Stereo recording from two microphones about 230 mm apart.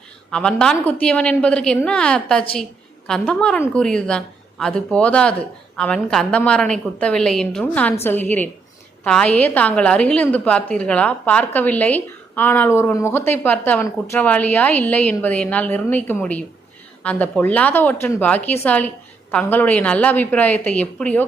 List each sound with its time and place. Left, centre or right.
0.3 s a woman's voice: centre